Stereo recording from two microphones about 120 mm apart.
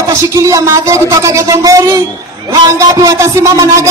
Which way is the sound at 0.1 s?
25° right (ahead or behind).